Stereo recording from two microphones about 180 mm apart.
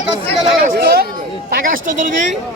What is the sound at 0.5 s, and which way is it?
Speech, 55° right (ahead or behind).